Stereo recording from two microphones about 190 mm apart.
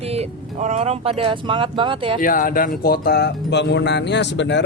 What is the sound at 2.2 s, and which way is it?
Speech, 45° left (ahead or behind).